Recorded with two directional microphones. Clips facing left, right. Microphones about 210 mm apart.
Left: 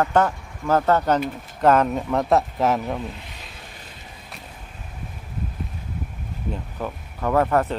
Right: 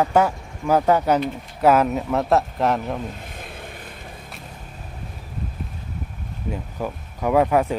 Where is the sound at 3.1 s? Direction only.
50° right (ahead or behind).